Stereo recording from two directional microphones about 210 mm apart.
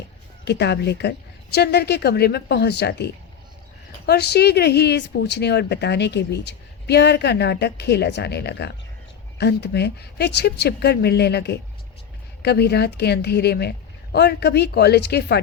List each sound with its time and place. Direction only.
0.4 s speech: 55° left (ahead or behind)